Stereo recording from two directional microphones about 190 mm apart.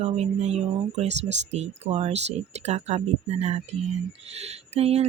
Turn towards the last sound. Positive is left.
turn(degrees=-35)  # may be behind; listen again after turning